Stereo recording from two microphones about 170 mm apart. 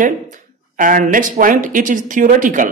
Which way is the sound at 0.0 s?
50° right (ahead or behind).